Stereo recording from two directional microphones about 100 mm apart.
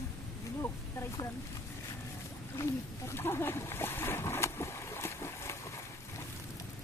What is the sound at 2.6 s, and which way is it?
Splash, 25° left (ahead or behind).